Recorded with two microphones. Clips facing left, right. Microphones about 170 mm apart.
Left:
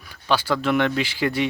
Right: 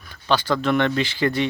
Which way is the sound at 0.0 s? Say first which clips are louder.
Right 1 dB; 10° left (ahead or behind).